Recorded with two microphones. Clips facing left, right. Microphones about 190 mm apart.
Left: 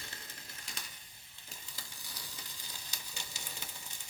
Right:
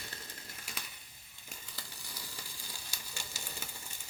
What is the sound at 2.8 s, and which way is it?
Sizzle, 20° left (ahead or behind).